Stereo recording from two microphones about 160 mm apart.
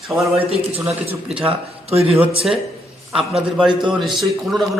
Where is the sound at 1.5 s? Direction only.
40° right (ahead or behind).